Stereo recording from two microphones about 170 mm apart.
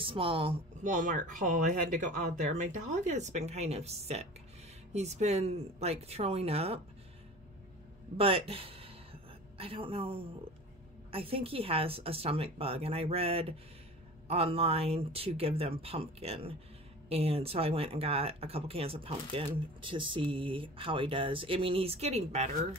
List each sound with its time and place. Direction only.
0.0 s speech: 30° right (ahead or behind)
0.7 s speech: 50° right (ahead or behind)
8.2 s a sound: 35° right (ahead or behind)
11.1 s speech: 35° right (ahead or behind)